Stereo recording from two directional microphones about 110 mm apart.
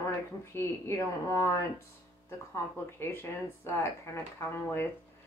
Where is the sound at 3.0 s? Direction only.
20° left (ahead or behind).